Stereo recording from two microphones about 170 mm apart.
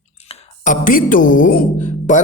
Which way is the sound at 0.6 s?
50° left (ahead or behind).